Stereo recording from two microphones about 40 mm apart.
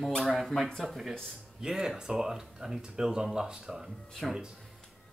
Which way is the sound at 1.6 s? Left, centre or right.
Centre.